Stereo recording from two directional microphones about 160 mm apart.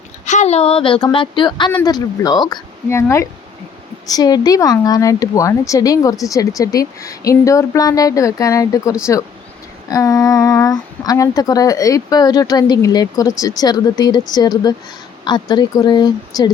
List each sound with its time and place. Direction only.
0.3 s speech: 45° left (ahead or behind); by 16.5 s 25° left (ahead or behind)